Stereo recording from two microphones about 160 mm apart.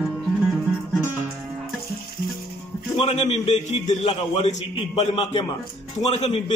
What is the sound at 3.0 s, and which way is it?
A man's voice, 40° left (ahead or behind).